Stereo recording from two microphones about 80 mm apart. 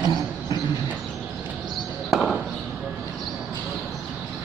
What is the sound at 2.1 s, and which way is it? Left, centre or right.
Basketball bounce, centre.